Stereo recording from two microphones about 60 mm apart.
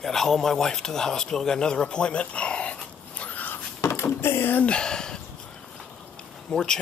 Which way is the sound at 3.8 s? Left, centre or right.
Left.